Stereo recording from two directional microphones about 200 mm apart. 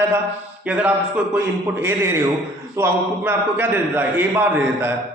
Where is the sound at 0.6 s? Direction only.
5° right (ahead or behind).